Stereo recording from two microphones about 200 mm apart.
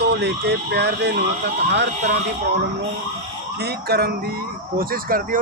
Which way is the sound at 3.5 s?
55° right (ahead or behind).